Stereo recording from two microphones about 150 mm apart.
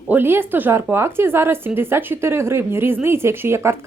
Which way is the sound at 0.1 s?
15° right (ahead or behind).